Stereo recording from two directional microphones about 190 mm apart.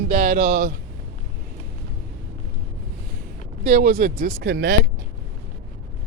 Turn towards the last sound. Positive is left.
turn(degrees=-55)  # may be behind; listen again after turning